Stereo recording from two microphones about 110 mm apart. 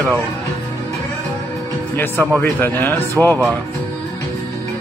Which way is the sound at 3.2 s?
5° left (ahead or behind).